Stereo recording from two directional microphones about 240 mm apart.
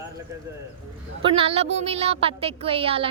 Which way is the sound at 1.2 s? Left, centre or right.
Right.